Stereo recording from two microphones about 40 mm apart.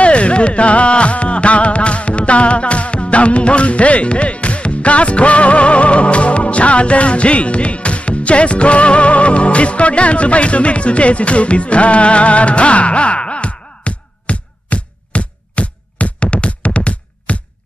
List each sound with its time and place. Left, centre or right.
0.0 s music: left